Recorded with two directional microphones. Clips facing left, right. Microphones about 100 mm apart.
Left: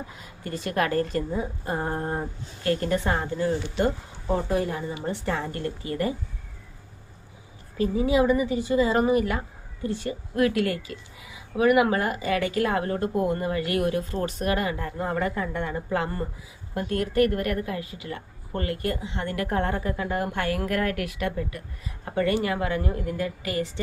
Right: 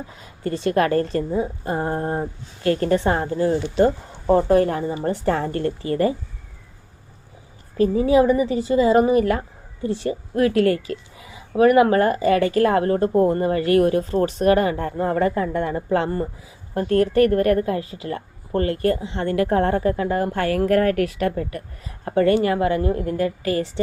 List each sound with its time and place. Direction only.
0.2 s a woman's voice: 30° right (ahead or behind)
4.3 s speech: 55° right (ahead or behind)
5.0 s a woman's voice: 40° right (ahead or behind)
7.8 s a woman's voice: 40° right (ahead or behind)